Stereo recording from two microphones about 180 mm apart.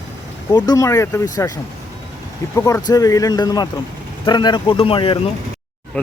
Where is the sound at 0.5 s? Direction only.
20° left (ahead or behind).